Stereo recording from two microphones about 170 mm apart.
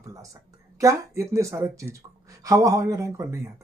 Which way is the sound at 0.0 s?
20° right (ahead or behind).